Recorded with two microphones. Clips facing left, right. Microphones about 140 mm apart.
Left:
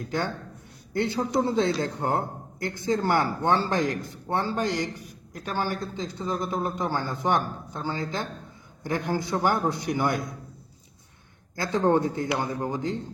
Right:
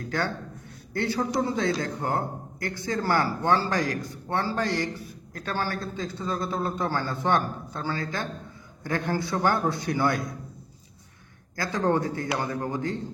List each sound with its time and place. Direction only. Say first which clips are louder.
0.0 s a man's voice: even; 20° left (ahead or behind)
11.5 s a man's voice: left 2 dB; 20° left (ahead or behind)